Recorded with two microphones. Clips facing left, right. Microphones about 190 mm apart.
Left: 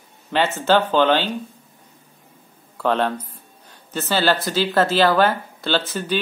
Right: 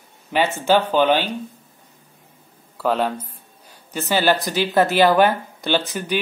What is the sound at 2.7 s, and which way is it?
Speech, 5° right (ahead or behind).